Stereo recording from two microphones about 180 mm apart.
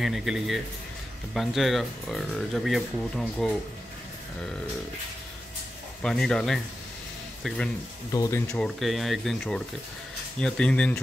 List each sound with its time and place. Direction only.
0.0 s speech: centre (ahead or behind)
6.0 s speech: 5° left (ahead or behind)
8.1 s speech: 20° left (ahead or behind)
8.5 s speech: 5° left (ahead or behind)